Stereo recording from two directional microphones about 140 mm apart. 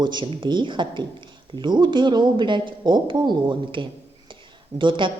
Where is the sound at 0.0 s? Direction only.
35° right (ahead or behind).